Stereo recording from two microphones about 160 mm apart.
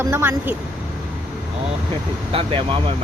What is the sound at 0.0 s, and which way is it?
Speech, 15° right (ahead or behind).